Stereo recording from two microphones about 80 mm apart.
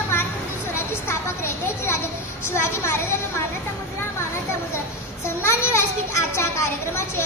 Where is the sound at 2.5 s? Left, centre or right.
Left.